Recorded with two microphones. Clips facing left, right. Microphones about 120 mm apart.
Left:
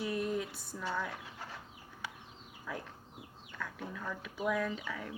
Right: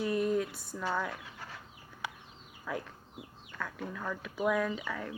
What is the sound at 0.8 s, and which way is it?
Speech, 90° right.